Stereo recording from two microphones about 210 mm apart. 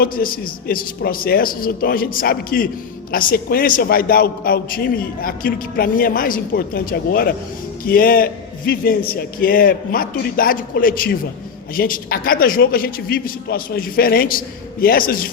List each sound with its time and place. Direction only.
0.0 s a man's voice: 45° left (ahead or behind)